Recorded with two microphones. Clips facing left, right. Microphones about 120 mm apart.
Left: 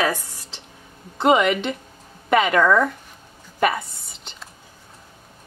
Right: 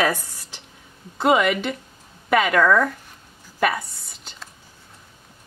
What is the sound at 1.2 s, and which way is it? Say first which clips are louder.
Speech: left 1 dB; centre (ahead or behind).